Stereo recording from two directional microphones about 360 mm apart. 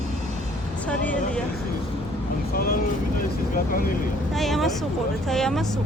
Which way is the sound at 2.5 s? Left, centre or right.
Left.